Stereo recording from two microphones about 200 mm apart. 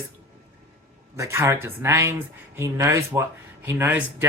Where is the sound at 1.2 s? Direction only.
15° right (ahead or behind).